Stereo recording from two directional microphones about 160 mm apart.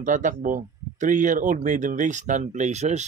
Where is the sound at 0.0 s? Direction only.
50° right (ahead or behind).